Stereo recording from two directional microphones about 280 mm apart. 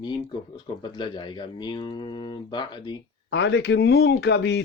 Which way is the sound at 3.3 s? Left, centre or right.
Left.